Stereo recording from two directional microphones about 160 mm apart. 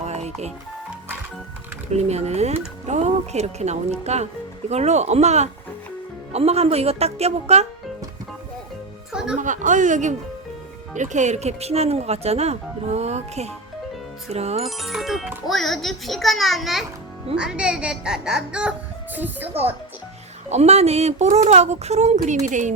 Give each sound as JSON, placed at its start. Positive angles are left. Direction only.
{"t": 0.0, "sound": "music", "side_deg": -45}
{"t": 1.9, "sound": "speech", "side_deg": -45}
{"t": 9.4, "sound": "speech", "side_deg": -50}
{"t": 14.6, "sound": "a child's voice", "side_deg": 0}
{"t": 20.5, "sound": "speech", "side_deg": -40}